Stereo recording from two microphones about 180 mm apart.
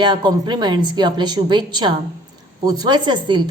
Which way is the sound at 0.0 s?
25° right (ahead or behind).